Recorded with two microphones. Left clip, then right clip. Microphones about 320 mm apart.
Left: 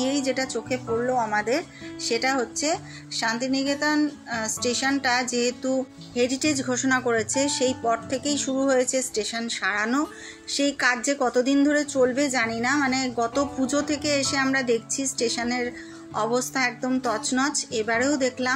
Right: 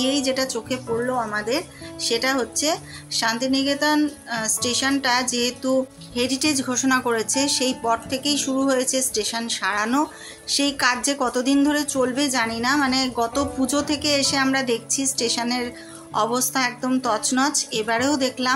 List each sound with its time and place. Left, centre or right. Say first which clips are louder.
0.0 s a woman's voice: right 3 dB; right